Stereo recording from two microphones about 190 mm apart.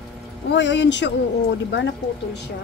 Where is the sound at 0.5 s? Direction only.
70° left (ahead or behind).